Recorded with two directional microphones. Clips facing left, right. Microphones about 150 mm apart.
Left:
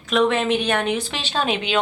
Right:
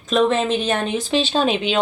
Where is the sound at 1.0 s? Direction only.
20° right (ahead or behind).